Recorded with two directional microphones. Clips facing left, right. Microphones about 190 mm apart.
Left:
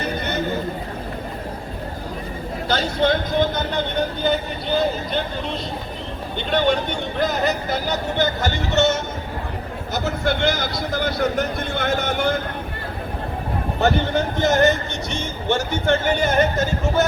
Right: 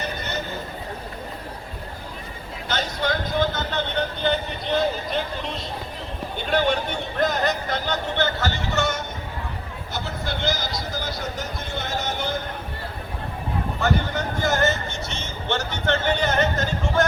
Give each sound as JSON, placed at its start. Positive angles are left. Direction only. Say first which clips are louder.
{"t": 2.6, "sound": "speech", "louder": "left 6 dB", "side_deg": 30}
{"t": 4.2, "sound": "speech", "louder": "left 3 dB", "side_deg": 5}
{"t": 6.3, "sound": "speech", "louder": "left 3 dB", "side_deg": -5}
{"t": 9.9, "sound": "speech", "louder": "left 8 dB", "side_deg": 50}
{"t": 13.7, "sound": "speech", "louder": "left 6 dB", "side_deg": 25}